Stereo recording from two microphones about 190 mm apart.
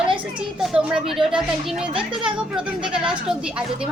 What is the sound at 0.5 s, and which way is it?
A child's voice, 5° right (ahead or behind).